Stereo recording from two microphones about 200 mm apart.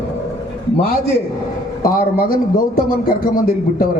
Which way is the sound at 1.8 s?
45° left (ahead or behind).